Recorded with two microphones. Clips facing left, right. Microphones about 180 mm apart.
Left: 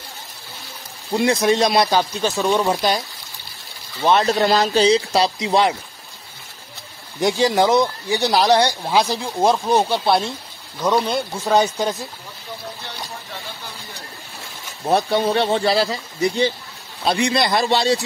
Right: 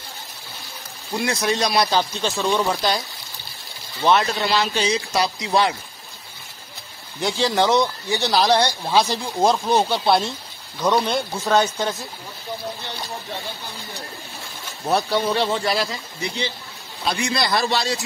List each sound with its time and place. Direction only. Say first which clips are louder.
1.1 s speech: left 6 dB; 25° left (ahead or behind)
2.0 s speech: left 2 dB; 15° left (ahead or behind)
4.2 s speech: left 5 dB; 40° left (ahead or behind); by 5.8 s 20° left (ahead or behind)
7.2 s speech: left 4 dB; 15° left (ahead or behind)
11.5 s speech: left 2 dB; 15° left (ahead or behind)
14.9 s speech: left 3 dB; 25° left (ahead or behind)